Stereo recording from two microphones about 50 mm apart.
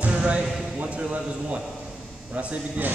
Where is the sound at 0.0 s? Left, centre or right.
Right.